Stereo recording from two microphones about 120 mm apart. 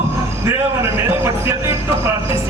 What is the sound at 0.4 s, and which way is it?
A man's voice, 20° right (ahead or behind).